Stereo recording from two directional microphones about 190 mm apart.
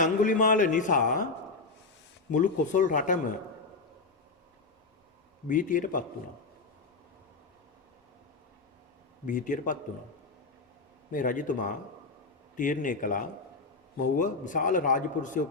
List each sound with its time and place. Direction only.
0.0 s a man's voice: 45° left (ahead or behind)
2.3 s a man's voice: 40° left (ahead or behind)
5.5 s a man's voice: 45° left (ahead or behind)
9.2 s a man's voice: 45° left (ahead or behind)
11.1 s a man's voice: 45° left (ahead or behind)